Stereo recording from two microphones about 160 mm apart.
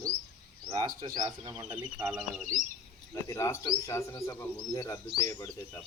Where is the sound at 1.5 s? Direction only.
5° right (ahead or behind).